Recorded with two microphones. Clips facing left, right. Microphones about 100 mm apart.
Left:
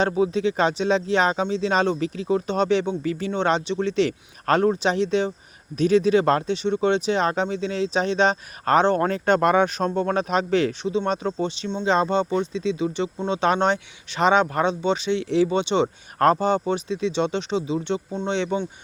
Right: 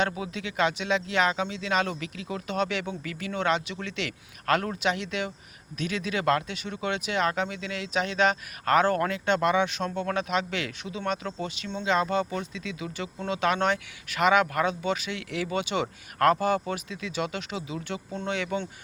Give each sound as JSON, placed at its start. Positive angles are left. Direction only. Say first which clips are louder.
{"t": 0.0, "sound": "speech", "louder": "left 9 dB", "side_deg": 30}